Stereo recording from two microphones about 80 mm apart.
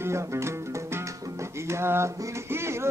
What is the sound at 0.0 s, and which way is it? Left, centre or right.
Music, right.